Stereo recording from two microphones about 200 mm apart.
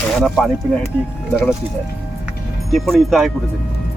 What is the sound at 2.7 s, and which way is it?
Speech, centre (ahead or behind).